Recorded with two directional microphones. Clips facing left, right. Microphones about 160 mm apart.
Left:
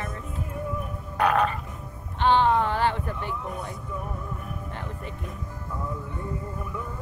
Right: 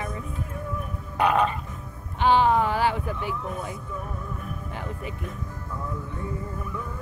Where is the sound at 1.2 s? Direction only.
15° right (ahead or behind).